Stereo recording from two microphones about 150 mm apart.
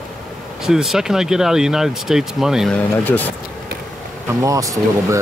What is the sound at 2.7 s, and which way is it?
Speech, 10° left (ahead or behind).